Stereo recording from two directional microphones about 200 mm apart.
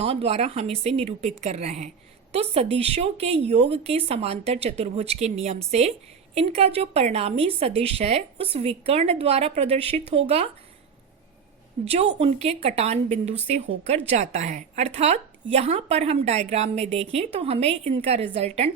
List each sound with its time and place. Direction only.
0.0 s a woman's voice: 30° right (ahead or behind)
11.9 s a woman's voice: 30° right (ahead or behind)